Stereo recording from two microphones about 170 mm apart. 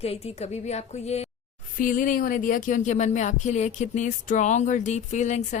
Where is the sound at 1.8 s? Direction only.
50° left (ahead or behind).